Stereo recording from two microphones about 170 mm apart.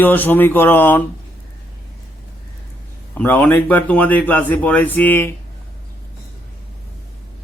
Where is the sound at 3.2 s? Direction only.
10° left (ahead or behind).